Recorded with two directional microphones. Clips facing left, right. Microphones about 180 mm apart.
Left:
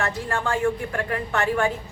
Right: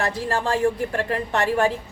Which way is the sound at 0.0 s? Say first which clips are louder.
Right 2 dB; 35° right (ahead or behind).